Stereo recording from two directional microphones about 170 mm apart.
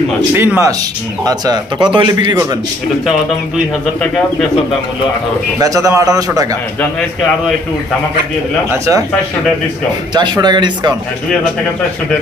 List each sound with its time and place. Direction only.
0.3 s speech: 15° right (ahead or behind)
5.6 s speech: 20° right (ahead or behind)
10.1 s speech: 25° right (ahead or behind)